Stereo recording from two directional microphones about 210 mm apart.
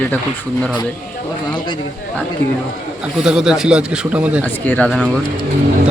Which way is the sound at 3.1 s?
5° right (ahead or behind).